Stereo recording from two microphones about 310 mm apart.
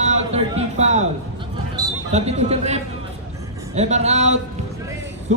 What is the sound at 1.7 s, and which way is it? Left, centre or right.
Speech, centre.